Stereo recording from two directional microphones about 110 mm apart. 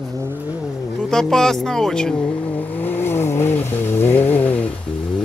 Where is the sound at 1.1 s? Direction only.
5° left (ahead or behind).